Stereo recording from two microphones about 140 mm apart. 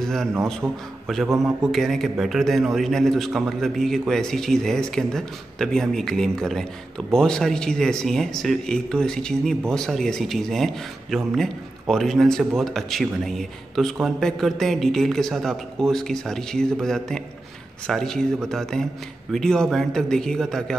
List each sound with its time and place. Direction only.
0.0 s a man's voice: centre (ahead or behind)